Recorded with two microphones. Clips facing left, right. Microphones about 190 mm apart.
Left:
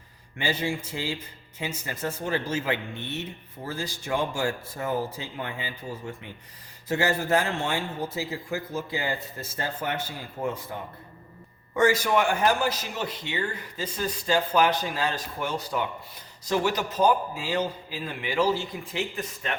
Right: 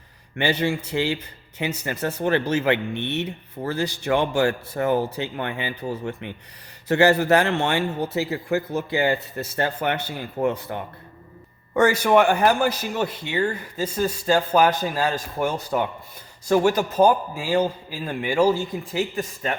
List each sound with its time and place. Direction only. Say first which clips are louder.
0.3 s a man's voice: right 6 dB; 65° right (ahead or behind); by 19.5 s 40° right (ahead or behind)